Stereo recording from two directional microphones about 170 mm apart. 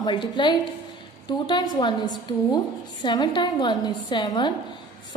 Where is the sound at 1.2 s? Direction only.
25° left (ahead or behind).